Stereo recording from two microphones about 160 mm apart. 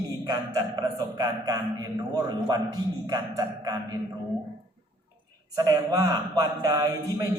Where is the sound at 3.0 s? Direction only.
20° right (ahead or behind).